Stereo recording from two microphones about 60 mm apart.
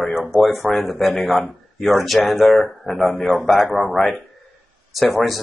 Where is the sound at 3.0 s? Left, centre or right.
Left.